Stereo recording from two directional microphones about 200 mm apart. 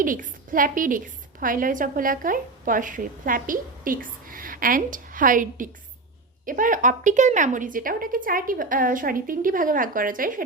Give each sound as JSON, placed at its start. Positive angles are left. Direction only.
{"t": 0.0, "sound": "a woman's voice", "side_deg": -45}